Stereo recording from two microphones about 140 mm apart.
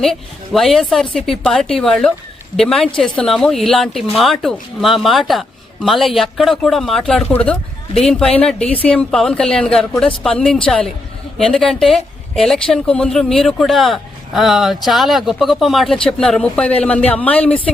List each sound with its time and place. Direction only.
0.0 s speech: centre (ahead or behind)